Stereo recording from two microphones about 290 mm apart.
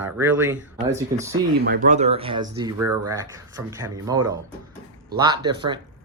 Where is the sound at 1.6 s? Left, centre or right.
Right.